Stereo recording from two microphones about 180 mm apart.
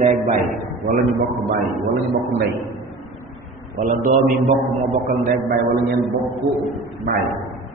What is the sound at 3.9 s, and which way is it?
A man's voice, 45° right (ahead or behind).